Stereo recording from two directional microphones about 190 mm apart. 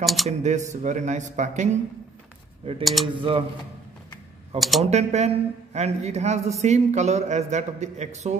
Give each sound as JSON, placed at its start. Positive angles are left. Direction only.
{"t": 0.0, "sound": "speech", "side_deg": 0}
{"t": 0.3, "sound": "speech", "side_deg": -40}
{"t": 2.8, "sound": "speech", "side_deg": 0}
{"t": 3.1, "sound": "speech", "side_deg": -25}
{"t": 4.6, "sound": "speech", "side_deg": 0}
{"t": 4.8, "sound": "speech", "side_deg": -35}